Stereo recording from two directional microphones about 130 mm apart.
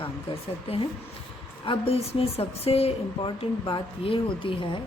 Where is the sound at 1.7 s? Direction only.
45° left (ahead or behind).